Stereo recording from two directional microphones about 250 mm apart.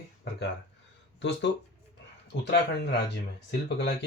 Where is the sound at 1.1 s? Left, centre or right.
Left.